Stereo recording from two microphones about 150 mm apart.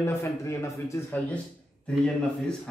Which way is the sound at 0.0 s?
15° left (ahead or behind).